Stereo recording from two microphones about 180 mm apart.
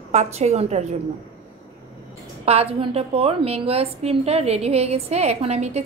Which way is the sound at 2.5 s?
35° right (ahead or behind).